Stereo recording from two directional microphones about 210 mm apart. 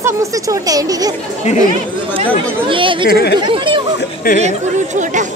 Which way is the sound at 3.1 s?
50° left (ahead or behind).